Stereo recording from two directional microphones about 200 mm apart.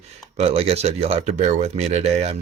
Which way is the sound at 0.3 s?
30° right (ahead or behind).